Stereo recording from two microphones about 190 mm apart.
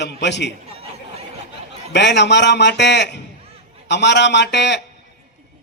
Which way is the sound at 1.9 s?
65° left (ahead or behind).